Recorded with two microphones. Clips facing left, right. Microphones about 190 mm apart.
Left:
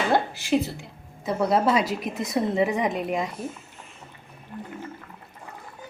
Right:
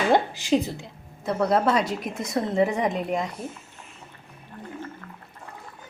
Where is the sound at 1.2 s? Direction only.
Centre (ahead or behind).